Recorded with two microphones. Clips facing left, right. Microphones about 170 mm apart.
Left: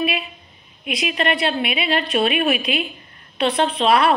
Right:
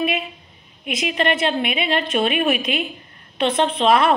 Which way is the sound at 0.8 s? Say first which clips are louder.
Right 1 dB; 25° right (ahead or behind).